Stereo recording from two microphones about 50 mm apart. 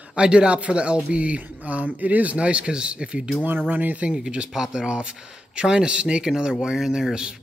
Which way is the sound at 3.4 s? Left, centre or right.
Right.